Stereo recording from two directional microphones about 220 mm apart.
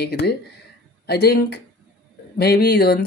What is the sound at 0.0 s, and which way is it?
Speech, 45° left (ahead or behind).